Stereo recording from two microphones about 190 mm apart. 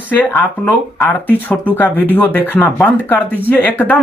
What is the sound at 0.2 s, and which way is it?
Speech, 10° left (ahead or behind).